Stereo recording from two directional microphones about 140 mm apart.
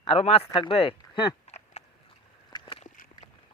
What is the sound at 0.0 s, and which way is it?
Speech, 45° left (ahead or behind).